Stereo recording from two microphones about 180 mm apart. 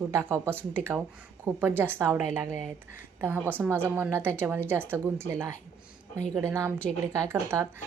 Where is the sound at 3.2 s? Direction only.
10° right (ahead or behind).